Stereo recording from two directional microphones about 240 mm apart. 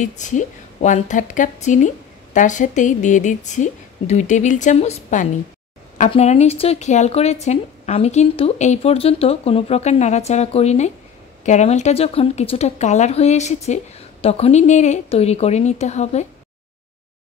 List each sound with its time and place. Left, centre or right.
0.0 s a woman's voice: left